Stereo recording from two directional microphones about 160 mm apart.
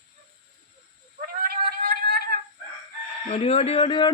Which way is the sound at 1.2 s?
65° right (ahead or behind).